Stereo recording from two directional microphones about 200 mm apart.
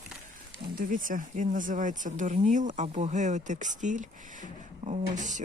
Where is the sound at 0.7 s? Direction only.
40° right (ahead or behind).